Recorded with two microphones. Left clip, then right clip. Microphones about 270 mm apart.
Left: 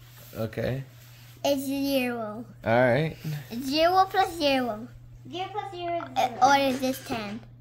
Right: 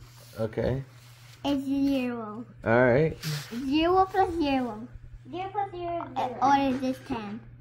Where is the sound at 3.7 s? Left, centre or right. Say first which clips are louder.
Left 2 dB; left.